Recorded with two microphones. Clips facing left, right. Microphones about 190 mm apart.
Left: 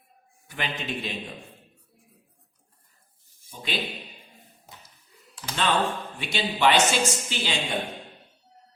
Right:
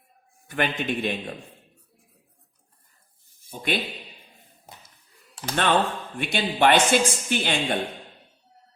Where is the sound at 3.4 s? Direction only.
55° right (ahead or behind).